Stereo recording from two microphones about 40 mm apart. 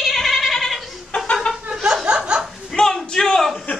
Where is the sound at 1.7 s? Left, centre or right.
Centre.